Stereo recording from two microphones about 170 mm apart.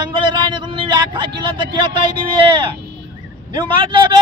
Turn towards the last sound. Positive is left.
turn(degrees=-30)  # may be behind; listen again after turning